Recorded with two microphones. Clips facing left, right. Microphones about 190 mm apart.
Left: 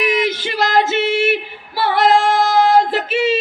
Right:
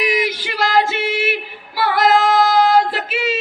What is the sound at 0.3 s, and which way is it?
Female singing, 20° left (ahead or behind).